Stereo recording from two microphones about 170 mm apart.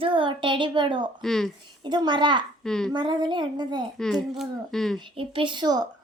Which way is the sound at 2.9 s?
25° right (ahead or behind).